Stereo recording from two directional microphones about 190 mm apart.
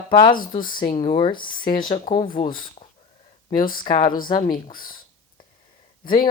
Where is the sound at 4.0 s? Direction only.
50° left (ahead or behind).